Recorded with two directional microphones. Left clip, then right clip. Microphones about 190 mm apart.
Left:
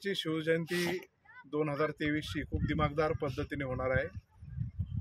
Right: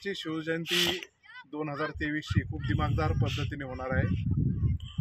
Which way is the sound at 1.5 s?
30° left (ahead or behind).